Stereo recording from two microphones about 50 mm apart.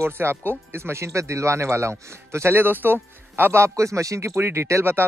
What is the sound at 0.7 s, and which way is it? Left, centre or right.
Speech, right.